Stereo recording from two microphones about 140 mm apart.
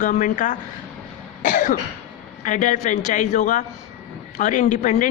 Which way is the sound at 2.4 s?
60° left (ahead or behind).